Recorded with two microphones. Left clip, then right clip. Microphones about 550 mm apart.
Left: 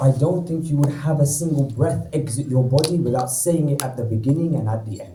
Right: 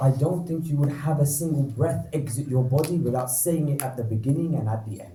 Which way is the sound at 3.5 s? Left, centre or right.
Right.